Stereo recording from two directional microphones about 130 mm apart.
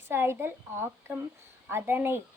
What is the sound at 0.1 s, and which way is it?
A woman's voice, 15° right (ahead or behind).